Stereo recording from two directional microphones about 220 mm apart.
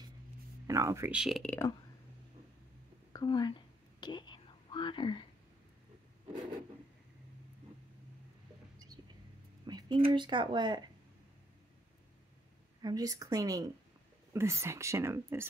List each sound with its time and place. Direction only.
0.7 s speech: 15° right (ahead or behind); by 1.7 s 5° left (ahead or behind)
3.1 s speech: 20° left (ahead or behind)
4.0 s whispering: 20° left (ahead or behind)
9.7 s speech: 20° right (ahead or behind)
12.8 s speech: 15° right (ahead or behind)